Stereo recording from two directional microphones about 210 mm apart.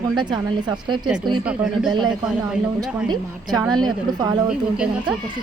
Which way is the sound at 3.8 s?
20° right (ahead or behind).